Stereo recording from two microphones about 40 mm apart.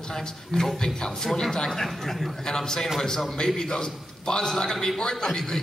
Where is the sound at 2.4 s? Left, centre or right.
Centre.